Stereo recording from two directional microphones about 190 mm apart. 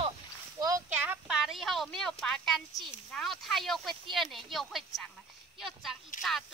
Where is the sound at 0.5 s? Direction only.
20° right (ahead or behind).